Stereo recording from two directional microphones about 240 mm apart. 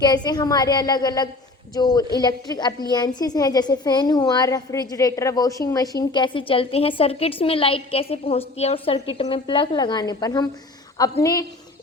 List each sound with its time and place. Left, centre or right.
0.0 s a woman's voice: centre